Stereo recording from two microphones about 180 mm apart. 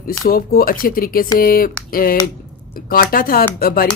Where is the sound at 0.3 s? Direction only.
55° left (ahead or behind).